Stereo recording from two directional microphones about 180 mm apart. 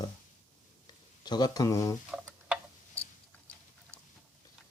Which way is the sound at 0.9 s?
25° left (ahead or behind).